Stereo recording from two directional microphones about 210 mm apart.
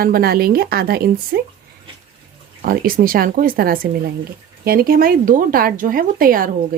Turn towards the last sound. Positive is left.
turn(degrees=-45)  # may be behind; listen again after turning